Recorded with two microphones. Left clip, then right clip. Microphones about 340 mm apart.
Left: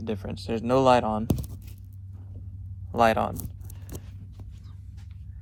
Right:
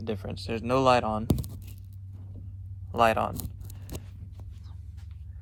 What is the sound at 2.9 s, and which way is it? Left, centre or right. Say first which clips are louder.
Speech: left 2 dB; centre.